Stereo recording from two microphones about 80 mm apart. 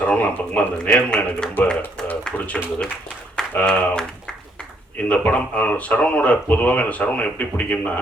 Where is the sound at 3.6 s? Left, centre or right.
Centre.